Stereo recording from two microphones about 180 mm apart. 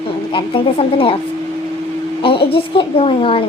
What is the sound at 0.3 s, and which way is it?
Speech, 30° left (ahead or behind).